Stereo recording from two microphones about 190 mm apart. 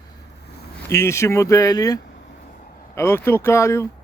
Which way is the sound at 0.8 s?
15° left (ahead or behind).